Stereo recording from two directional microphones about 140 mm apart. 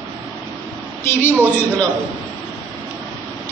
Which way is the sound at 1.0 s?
15° left (ahead or behind).